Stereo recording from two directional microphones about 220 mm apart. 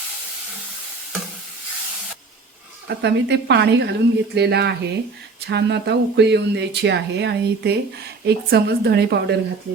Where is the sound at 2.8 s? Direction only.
50° right (ahead or behind).